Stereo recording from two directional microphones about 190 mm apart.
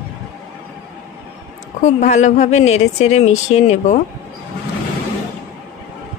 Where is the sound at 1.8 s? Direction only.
40° left (ahead or behind).